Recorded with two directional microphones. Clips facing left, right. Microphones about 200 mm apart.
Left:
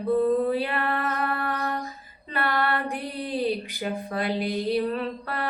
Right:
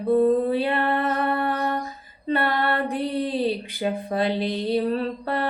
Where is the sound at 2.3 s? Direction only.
25° right (ahead or behind).